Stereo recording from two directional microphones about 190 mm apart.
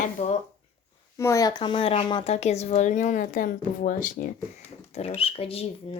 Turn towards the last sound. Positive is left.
turn(degrees=30)  # may be behind; listen again after turning